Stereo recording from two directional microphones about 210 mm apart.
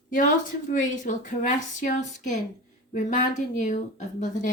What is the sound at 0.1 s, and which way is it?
Speech, 35° left (ahead or behind).